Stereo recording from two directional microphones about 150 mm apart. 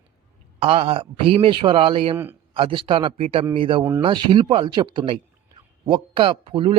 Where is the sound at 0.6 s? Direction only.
40° right (ahead or behind).